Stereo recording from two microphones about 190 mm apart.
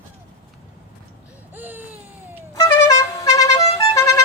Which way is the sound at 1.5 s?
10° right (ahead or behind).